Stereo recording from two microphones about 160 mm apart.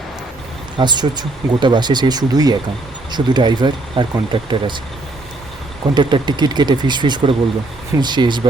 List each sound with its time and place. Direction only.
0.8 s speech: 25° right (ahead or behind)
5.9 s speech: 30° right (ahead or behind)